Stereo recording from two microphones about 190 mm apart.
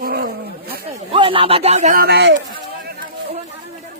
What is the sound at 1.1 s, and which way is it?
Speech, 25° right (ahead or behind).